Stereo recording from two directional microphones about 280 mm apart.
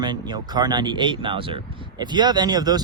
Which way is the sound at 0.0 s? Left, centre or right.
Centre.